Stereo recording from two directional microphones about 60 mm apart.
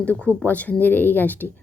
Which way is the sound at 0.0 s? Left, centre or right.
Left.